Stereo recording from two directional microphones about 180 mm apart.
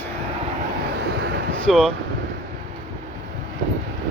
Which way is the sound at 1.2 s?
70° right (ahead or behind).